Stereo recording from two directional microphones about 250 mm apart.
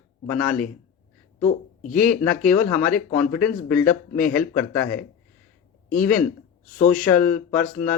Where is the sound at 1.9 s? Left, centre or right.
Centre.